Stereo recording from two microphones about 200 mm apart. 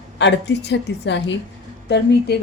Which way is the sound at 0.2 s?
60° left (ahead or behind).